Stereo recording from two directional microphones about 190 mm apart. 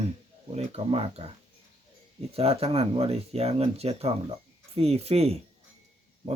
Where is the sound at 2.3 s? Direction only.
30° right (ahead or behind).